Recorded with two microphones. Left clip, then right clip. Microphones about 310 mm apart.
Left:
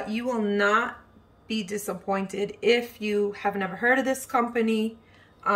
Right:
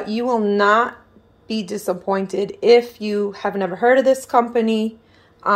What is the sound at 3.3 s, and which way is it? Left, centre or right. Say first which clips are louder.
Speech: right 6 dB; right.